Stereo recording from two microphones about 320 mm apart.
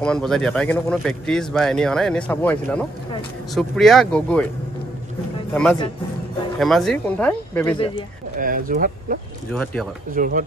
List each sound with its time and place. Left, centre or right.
0.0 s speech: centre
5.5 s speech: centre
8.4 s speech: right
9.5 s speech: centre
10.1 s speech: right